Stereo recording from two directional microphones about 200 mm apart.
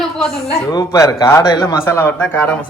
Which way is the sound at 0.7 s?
15° left (ahead or behind).